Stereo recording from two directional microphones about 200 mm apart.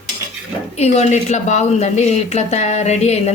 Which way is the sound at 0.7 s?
30° left (ahead or behind).